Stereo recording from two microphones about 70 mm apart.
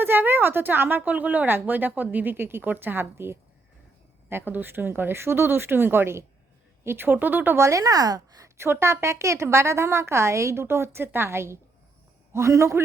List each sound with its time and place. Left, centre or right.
0.0 s a woman's voice: right
7.6 s speech: right
8.5 s a woman's voice: right